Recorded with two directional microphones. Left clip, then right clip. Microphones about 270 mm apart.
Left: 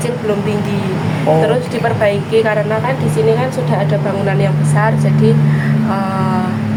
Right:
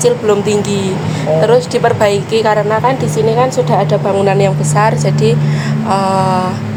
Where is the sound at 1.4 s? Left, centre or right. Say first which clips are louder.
Right 5 dB; right.